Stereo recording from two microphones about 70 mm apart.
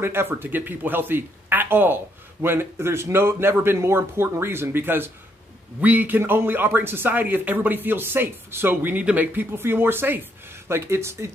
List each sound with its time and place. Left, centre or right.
0.0 s speech: right